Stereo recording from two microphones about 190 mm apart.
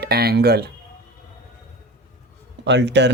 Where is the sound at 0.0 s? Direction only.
55° right (ahead or behind).